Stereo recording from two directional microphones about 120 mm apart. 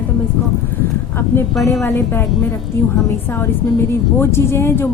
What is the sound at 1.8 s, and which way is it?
Speech, 20° left (ahead or behind).